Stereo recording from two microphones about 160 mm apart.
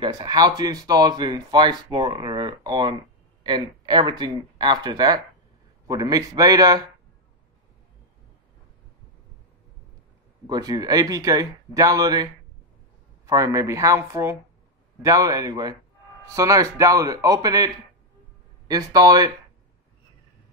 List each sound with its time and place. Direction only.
0.0 s speech: 25° right (ahead or behind)
10.4 s speech: 25° right (ahead or behind)